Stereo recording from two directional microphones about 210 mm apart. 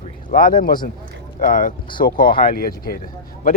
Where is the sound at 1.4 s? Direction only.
40° left (ahead or behind).